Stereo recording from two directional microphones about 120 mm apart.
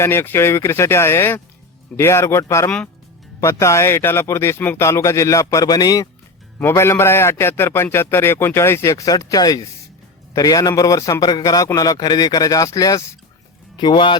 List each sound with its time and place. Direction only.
0.0 s a man's voice: 20° left (ahead or behind)
2.6 s speech: 10° left (ahead or behind)
3.4 s a man's voice: 25° left (ahead or behind)
6.6 s a man's voice: 20° left (ahead or behind)
13.7 s speech: 40° left (ahead or behind)